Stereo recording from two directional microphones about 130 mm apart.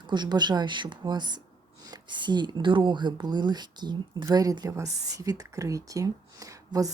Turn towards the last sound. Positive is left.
turn(degrees=-25)  # may be behind; listen again after turning